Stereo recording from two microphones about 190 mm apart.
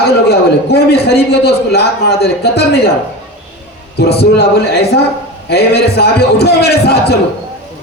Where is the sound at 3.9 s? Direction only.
60° left (ahead or behind).